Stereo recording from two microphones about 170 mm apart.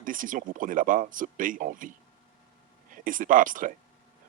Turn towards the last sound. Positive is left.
turn(degrees=-50)  # may be behind; listen again after turning